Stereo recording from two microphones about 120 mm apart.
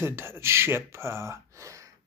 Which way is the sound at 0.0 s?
20° right (ahead or behind).